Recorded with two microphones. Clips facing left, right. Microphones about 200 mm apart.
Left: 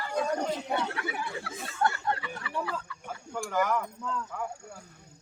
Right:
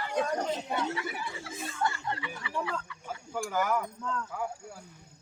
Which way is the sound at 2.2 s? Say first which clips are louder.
Even; 40° left (ahead or behind).